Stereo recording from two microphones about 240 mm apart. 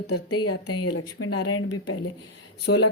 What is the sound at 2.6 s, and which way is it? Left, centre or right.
Speech, left.